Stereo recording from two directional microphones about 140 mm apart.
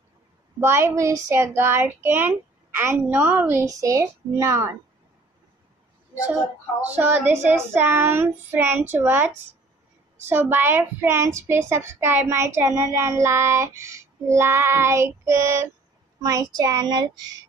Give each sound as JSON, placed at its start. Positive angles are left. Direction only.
{"t": 0.6, "sound": "a woman's voice", "side_deg": -20}
{"t": 7.0, "sound": "a woman's voice", "side_deg": -10}